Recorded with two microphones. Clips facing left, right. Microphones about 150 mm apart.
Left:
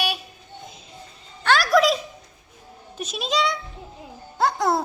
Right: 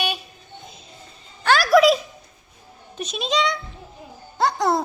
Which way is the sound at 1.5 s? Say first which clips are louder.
Right 3 dB; 5° right (ahead or behind).